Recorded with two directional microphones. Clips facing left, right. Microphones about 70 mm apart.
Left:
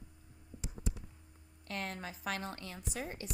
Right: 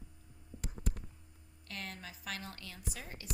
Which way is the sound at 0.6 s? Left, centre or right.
Right.